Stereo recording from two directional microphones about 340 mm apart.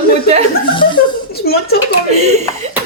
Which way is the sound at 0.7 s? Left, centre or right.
Centre.